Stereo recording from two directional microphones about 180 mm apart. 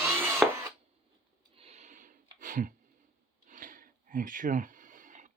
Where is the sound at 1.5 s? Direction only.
35° right (ahead or behind).